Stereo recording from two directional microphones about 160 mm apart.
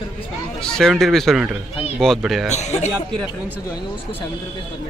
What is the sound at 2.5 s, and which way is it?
Speech, 45° left (ahead or behind).